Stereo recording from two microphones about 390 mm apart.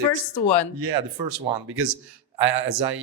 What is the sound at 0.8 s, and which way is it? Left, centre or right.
Speech, right.